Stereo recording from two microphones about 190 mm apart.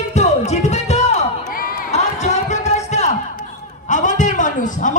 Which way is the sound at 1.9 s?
35° left (ahead or behind).